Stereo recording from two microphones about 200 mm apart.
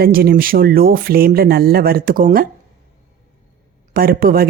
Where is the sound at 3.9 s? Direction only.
45° right (ahead or behind).